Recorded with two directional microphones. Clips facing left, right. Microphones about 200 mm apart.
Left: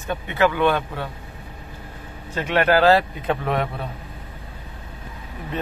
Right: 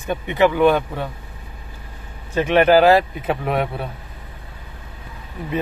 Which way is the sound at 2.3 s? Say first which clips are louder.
Right 5 dB; 15° right (ahead or behind).